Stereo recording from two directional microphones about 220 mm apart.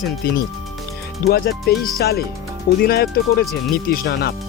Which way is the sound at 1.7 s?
Centre (ahead or behind).